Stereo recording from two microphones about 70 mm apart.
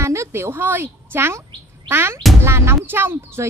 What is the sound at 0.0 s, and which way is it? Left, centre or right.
A woman's voice, right.